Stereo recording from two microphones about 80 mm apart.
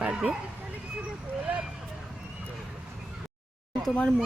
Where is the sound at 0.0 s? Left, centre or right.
Centre.